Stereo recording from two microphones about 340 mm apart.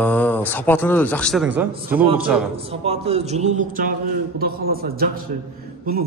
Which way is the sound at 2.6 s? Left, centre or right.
Centre.